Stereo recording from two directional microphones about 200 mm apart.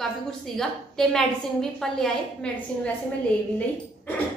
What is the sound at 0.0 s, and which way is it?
A woman's voice, centre (ahead or behind).